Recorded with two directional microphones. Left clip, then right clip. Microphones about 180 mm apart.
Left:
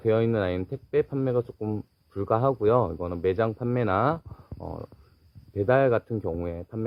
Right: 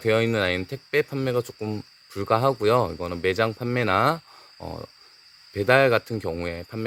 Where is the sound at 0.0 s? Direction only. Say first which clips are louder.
Right 2 dB; 15° right (ahead or behind).